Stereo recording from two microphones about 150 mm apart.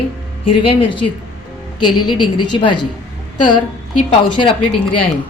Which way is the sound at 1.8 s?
30° left (ahead or behind).